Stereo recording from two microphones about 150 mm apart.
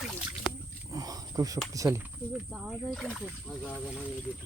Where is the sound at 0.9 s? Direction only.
25° right (ahead or behind).